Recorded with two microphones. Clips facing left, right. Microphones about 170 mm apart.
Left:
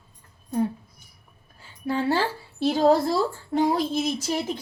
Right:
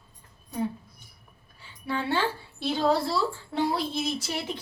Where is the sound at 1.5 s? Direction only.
40° left (ahead or behind).